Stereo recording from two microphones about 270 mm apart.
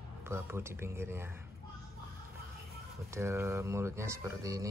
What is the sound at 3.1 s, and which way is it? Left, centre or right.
Speech, centre.